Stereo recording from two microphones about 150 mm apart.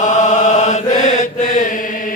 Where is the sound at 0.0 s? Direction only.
55° left (ahead or behind).